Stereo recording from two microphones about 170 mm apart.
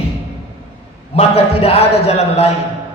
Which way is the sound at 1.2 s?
35° left (ahead or behind).